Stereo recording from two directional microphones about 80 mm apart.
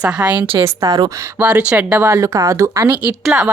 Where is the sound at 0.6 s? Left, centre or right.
Right.